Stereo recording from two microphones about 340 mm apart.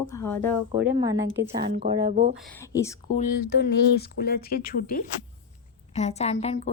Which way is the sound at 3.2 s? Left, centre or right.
Left.